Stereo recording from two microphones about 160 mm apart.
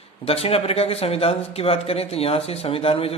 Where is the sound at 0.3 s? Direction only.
40° left (ahead or behind).